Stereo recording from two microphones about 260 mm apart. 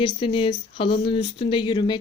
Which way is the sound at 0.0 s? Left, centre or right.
Centre.